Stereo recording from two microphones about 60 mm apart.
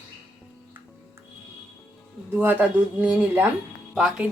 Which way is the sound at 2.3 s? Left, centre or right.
Right.